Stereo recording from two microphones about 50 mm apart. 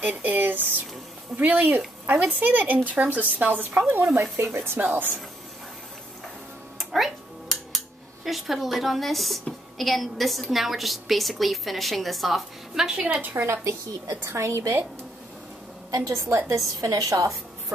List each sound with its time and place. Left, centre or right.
0.0 s a sound: right
1.3 s speech: right
3.9 s speech: right
6.8 s music: centre
8.3 s a woman's voice: centre
12.7 s a woman's voice: centre
13.1 s a woman's voice: right
14.2 s a woman's voice: right
16.0 s a woman's voice: right
16.6 s a woman's voice: right